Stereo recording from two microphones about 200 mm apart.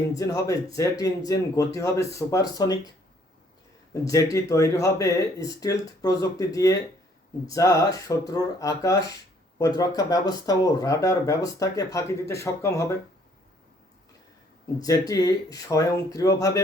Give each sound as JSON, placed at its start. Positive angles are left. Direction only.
{"t": 0.2, "sound": "speech", "side_deg": 15}
{"t": 3.9, "sound": "speech", "side_deg": 15}
{"t": 14.8, "sound": "speech", "side_deg": 20}